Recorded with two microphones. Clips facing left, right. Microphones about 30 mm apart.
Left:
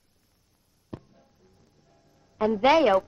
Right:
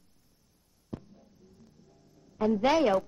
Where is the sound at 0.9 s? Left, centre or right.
Left.